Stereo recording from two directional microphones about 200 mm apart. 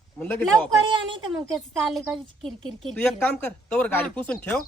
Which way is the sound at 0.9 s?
25° right (ahead or behind).